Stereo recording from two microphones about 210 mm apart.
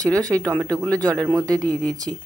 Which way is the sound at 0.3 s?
5° left (ahead or behind).